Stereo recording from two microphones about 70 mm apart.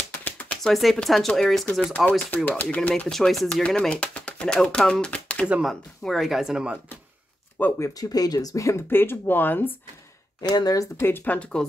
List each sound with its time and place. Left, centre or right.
0.2 s a sound: left
0.7 s speech: centre
2.0 s speech: left
3.1 s speech: centre
3.9 s speech: centre
5.6 s speech: centre
7.6 s speech: left
7.9 s speech: left
8.8 s speech: left
10.4 s speech: left
11.0 s speech: left
11.3 s speech: centre